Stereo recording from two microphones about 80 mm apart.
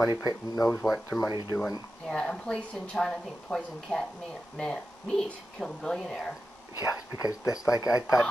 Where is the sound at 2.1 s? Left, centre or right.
Centre.